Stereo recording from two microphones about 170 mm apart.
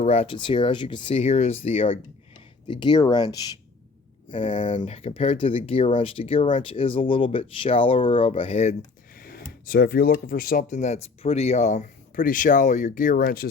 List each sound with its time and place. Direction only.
0.0 s speech: 35° left (ahead or behind)
9.1 s a sound: 60° left (ahead or behind)
9.5 s speech: 60° left (ahead or behind)